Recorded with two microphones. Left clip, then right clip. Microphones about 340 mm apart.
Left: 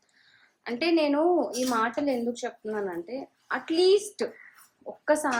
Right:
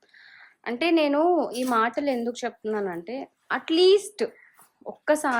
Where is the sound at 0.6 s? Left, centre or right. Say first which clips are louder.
Right 2 dB; centre.